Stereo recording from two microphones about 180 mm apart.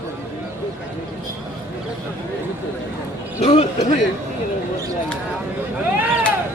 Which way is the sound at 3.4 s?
40° left (ahead or behind).